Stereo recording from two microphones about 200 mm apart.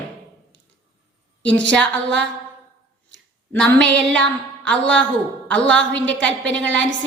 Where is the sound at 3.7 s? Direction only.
65° right (ahead or behind).